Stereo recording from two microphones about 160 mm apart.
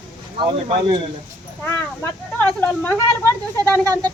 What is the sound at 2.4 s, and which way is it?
Speech, 10° left (ahead or behind).